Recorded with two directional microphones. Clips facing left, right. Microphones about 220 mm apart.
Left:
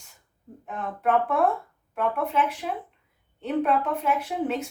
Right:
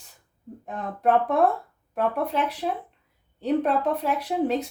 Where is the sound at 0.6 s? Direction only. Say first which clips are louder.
Right 3 dB; 35° right (ahead or behind).